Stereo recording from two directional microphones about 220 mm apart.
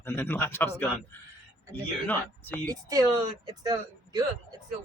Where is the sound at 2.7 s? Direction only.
15° right (ahead or behind).